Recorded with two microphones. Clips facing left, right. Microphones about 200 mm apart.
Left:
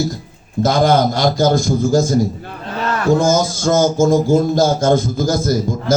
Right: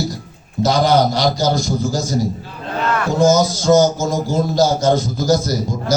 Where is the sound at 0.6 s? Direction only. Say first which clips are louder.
Left 1 dB; 50° left (ahead or behind).